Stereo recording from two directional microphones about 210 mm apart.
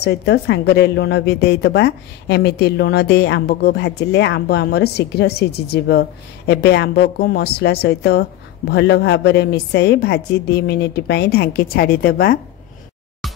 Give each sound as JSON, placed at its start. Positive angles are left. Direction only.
{"t": 0.0, "sound": "a woman's voice", "side_deg": 50}